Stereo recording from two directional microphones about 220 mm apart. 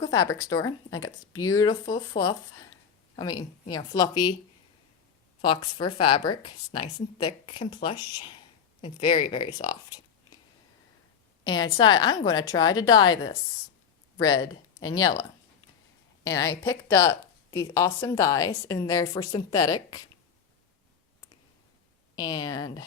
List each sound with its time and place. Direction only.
0.0 s speech: 15° left (ahead or behind)
5.4 s a woman's voice: 20° left (ahead or behind)
11.4 s a woman's voice: 20° left (ahead or behind)
16.2 s speech: 15° left (ahead or behind)
22.1 s speech: 20° left (ahead or behind)